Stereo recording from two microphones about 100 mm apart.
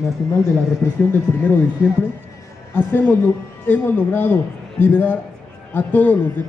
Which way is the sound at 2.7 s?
20° left (ahead or behind).